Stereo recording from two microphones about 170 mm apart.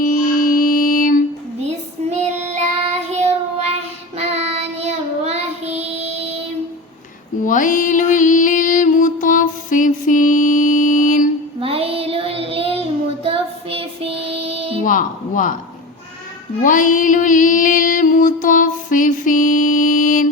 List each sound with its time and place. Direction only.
0.0 s mantra: 55° left (ahead or behind)
2.0 s child singing: 40° right (ahead or behind)
7.4 s music: 50° left (ahead or behind)
11.6 s child singing: 35° right (ahead or behind)
14.8 s a sound: 50° left (ahead or behind)
16.6 s music: 50° left (ahead or behind)